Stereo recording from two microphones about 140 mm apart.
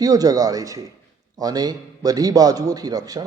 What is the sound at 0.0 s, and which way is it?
A man's voice, 25° right (ahead or behind).